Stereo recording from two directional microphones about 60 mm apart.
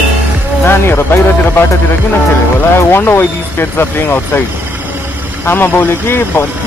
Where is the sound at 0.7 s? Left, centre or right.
Left.